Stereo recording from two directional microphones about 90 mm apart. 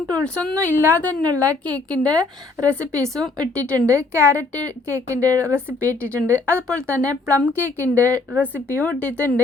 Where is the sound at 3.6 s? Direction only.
35° right (ahead or behind).